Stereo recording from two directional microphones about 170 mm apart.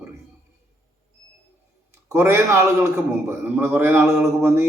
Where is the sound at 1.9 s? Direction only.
15° right (ahead or behind).